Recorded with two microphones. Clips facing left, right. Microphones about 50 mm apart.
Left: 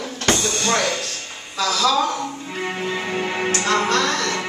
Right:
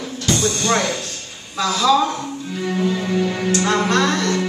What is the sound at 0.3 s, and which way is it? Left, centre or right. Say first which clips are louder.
Music: left 1 dB; left.